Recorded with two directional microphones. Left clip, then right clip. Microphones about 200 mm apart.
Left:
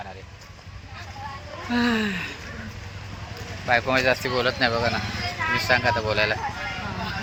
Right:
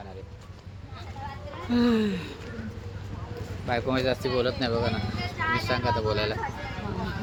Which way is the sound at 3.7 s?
5° right (ahead or behind).